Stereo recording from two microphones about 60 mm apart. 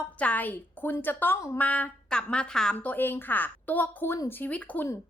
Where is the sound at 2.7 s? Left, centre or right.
Left.